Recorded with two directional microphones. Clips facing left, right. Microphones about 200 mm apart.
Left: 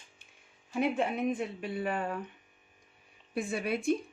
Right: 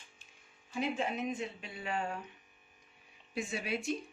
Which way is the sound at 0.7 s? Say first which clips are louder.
Left 5 dB; 55° left (ahead or behind).